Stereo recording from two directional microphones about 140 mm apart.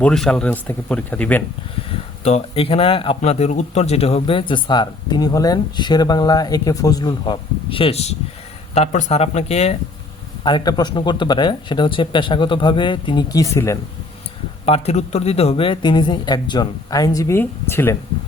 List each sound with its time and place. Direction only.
0.0 s speech: 5° left (ahead or behind)
2.2 s speech: 45° left (ahead or behind)
3.2 s speech: 50° left (ahead or behind)
8.7 s speech: 55° left (ahead or behind)
10.4 s speech: 30° left (ahead or behind)
14.6 s speech: 45° left (ahead or behind); by 17.9 s 15° left (ahead or behind)